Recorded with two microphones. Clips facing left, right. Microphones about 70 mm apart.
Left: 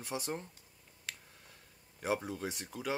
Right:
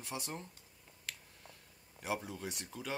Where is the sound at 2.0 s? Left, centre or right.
Left.